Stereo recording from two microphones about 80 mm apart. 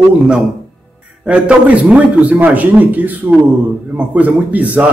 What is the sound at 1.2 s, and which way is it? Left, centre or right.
A man's voice, centre.